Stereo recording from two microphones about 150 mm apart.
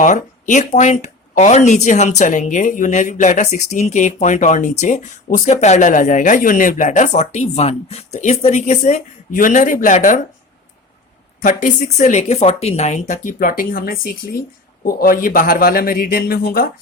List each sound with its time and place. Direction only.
0.0 s speech: 55° left (ahead or behind)
11.4 s a man's voice: 55° left (ahead or behind); by 16.6 s 90° left